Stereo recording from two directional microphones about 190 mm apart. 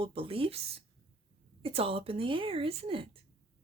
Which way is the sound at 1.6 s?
30° right (ahead or behind).